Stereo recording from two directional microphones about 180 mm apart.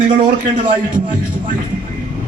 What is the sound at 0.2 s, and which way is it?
Speech, 30° right (ahead or behind).